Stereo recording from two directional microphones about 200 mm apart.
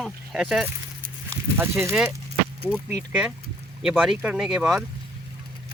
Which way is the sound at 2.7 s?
10° left (ahead or behind).